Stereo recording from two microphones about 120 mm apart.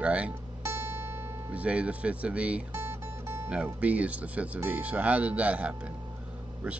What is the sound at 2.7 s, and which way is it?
Music, 20° right (ahead or behind).